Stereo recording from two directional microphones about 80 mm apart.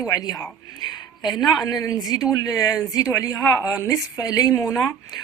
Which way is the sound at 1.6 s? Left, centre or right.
Left.